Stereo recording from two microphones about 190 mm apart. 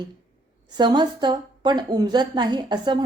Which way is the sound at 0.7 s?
25° right (ahead or behind).